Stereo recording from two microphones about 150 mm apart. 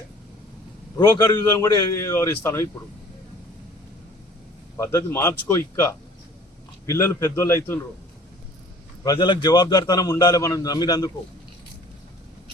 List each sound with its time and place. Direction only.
0.9 s a man's voice: 20° left (ahead or behind)
4.8 s a man's voice: 15° left (ahead or behind)
9.0 s a man's voice: 30° left (ahead or behind)